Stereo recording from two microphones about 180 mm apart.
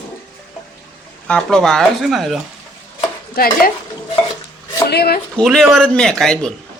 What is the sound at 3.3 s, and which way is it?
Stir, 55° left (ahead or behind).